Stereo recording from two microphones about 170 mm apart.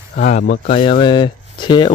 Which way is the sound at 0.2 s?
45° left (ahead or behind).